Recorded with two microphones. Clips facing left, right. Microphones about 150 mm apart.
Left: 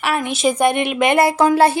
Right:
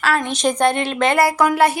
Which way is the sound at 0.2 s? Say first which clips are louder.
Left 1 dB; 5° left (ahead or behind).